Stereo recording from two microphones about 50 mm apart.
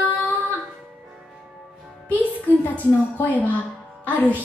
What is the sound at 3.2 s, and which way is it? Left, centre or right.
Music, left.